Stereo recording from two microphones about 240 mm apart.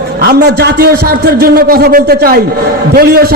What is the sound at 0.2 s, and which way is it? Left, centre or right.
A man's voice, right.